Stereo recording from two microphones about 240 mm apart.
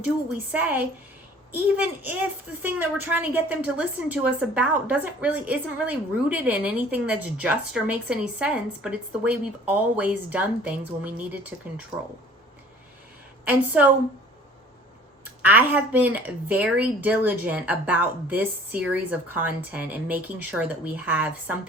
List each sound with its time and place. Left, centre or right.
0.5 s a woman's voice: centre
13.4 s speech: centre
15.2 s speech: centre